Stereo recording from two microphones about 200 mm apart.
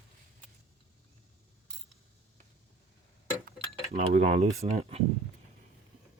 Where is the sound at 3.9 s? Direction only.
35° right (ahead or behind).